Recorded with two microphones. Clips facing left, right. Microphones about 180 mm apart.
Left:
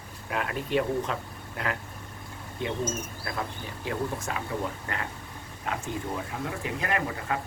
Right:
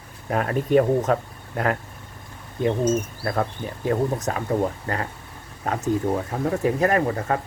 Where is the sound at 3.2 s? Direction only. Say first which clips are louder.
Right 9 dB; 45° right (ahead or behind).